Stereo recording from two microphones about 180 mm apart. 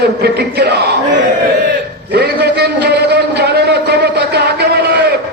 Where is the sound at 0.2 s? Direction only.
60° right (ahead or behind).